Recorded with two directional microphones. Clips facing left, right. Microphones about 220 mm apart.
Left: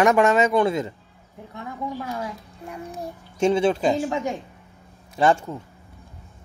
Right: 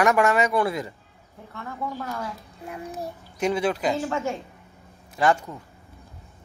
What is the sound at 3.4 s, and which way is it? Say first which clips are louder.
Speech: left 4 dB; 25° left (ahead or behind).